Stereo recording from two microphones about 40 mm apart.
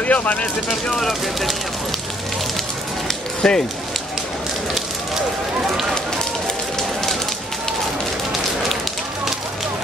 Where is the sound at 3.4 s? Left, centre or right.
Centre.